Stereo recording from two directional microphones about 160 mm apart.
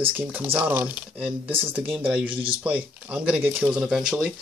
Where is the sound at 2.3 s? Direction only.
35° right (ahead or behind).